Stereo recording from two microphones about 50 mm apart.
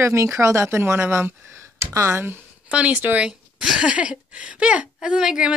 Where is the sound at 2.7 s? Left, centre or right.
Right.